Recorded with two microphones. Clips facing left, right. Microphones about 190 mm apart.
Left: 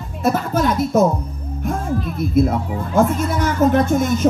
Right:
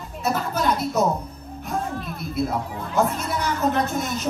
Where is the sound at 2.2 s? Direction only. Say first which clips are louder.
Left 8 dB; 50° left (ahead or behind).